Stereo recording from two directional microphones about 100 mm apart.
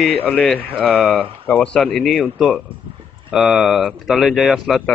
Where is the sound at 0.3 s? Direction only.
10° left (ahead or behind).